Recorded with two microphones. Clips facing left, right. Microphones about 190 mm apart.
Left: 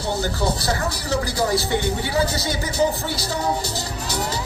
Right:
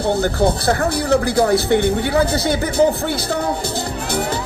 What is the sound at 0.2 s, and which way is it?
Speech, 55° right (ahead or behind).